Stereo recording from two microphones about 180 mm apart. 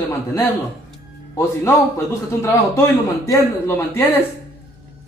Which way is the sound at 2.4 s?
15° left (ahead or behind).